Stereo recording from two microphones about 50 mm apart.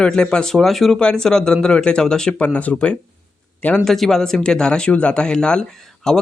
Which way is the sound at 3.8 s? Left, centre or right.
Centre.